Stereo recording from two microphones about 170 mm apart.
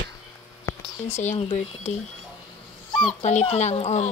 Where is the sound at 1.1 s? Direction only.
45° left (ahead or behind).